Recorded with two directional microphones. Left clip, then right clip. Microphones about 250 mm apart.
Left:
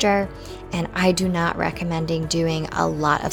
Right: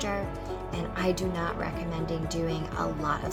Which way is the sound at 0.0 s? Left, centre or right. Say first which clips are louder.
Left 12 dB; left.